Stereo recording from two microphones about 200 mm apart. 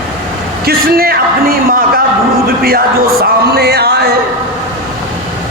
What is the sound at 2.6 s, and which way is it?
Speech, 50° right (ahead or behind).